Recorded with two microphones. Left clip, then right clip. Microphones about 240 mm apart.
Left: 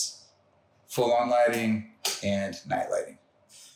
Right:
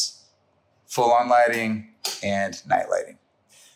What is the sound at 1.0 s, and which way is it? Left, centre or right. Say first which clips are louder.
Speech: right 5 dB; centre.